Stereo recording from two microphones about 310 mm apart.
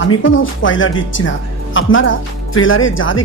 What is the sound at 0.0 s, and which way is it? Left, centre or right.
A woman's voice, left.